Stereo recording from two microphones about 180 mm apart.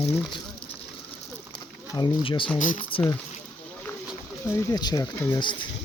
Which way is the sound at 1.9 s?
25° left (ahead or behind).